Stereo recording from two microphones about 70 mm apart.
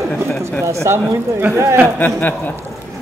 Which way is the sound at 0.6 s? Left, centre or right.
Right.